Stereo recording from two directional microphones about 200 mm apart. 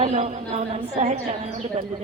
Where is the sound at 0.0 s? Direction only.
35° right (ahead or behind).